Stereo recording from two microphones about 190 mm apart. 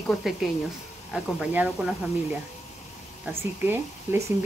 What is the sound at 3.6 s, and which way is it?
Speech, 10° right (ahead or behind).